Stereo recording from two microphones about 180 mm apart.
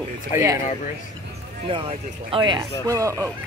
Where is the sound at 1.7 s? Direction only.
30° right (ahead or behind).